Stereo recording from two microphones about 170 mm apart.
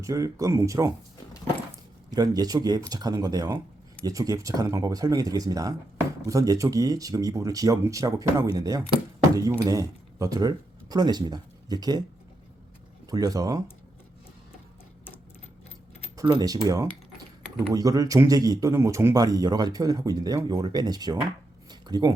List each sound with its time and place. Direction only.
0.0 s speech: 20° right (ahead or behind)
2.0 s speech: 20° right (ahead or behind)
13.1 s speech: 20° right (ahead or behind)
16.1 s speech: 25° right (ahead or behind)
21.7 s a sound: 25° right (ahead or behind)